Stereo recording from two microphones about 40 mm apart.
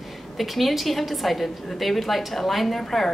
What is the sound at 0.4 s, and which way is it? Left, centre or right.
A woman's voice, centre.